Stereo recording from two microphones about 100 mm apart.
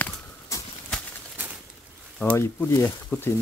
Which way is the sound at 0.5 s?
35° left (ahead or behind).